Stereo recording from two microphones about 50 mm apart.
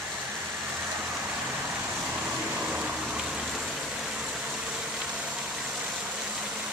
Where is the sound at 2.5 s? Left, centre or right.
Right.